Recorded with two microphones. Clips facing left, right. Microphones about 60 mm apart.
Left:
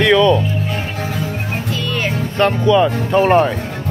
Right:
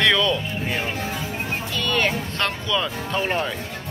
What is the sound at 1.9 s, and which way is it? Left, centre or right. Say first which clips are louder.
Music: right 1 dB; centre.